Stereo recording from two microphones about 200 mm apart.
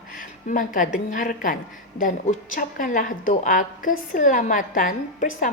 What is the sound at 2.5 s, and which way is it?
A woman's voice, 40° left (ahead or behind).